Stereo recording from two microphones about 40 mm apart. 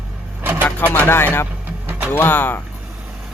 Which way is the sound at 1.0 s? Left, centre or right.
Left.